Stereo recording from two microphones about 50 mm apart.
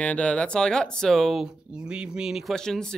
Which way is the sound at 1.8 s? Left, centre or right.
Centre.